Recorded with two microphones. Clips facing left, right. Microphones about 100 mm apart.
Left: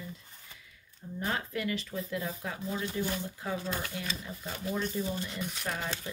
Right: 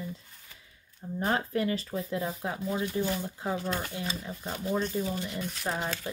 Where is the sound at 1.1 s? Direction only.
35° right (ahead or behind).